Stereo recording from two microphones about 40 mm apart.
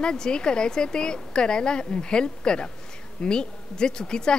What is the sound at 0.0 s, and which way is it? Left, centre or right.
Speech, left.